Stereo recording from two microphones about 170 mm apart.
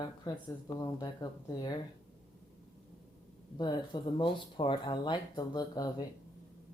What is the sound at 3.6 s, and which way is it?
Speech, 25° left (ahead or behind).